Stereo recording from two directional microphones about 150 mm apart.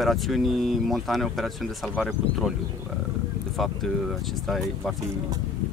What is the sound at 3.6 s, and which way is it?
Speech, centre (ahead or behind).